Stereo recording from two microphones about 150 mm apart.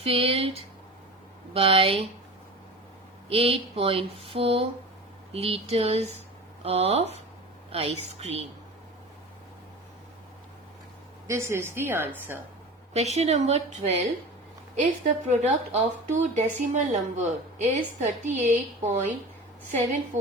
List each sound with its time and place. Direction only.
0.0 s speech: 40° right (ahead or behind)
3.2 s a woman's voice: 40° right (ahead or behind)
11.3 s a woman's voice: 20° right (ahead or behind)
12.9 s a woman's voice: 45° right (ahead or behind)
15.0 s a woman's voice: 55° right (ahead or behind)